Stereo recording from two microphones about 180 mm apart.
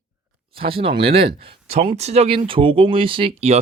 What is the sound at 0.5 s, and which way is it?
Speech, 30° right (ahead or behind).